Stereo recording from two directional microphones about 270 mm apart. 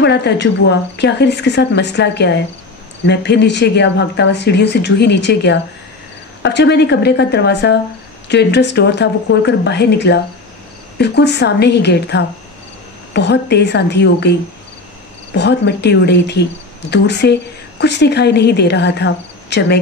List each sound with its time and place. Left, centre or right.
0.0 s a woman's voice: left
15.3 s a woman's voice: left